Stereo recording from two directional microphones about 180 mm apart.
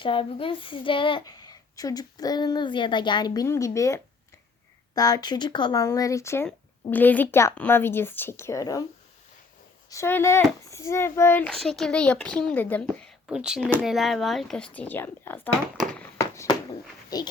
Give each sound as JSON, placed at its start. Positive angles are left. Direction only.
{"t": 0.0, "sound": "a child's voice", "side_deg": 30}
{"t": 9.9, "sound": "a child's voice", "side_deg": 15}
{"t": 16.0, "sound": "a sound", "side_deg": 15}
{"t": 17.1, "sound": "speech", "side_deg": 20}